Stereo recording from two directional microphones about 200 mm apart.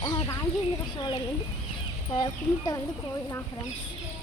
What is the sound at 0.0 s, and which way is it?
Chicken, 20° left (ahead or behind).